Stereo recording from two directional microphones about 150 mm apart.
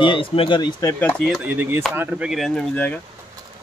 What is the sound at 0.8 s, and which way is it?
Speech, 10° left (ahead or behind).